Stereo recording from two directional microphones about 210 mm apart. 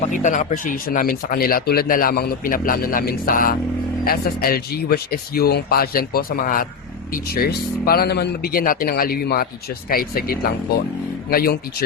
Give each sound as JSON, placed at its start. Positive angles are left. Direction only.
{"t": 0.1, "sound": "speech", "side_deg": 35}